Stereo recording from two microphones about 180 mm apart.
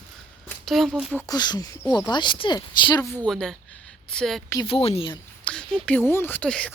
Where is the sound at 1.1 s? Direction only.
20° left (ahead or behind).